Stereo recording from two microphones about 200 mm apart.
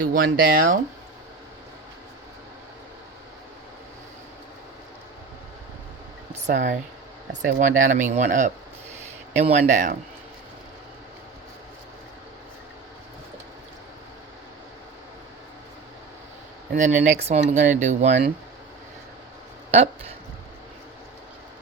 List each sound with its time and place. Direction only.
0.0 s speech: 45° right (ahead or behind)
6.4 s speech: 40° right (ahead or behind)
16.7 s speech: 35° right (ahead or behind)
19.7 s speech: 30° right (ahead or behind)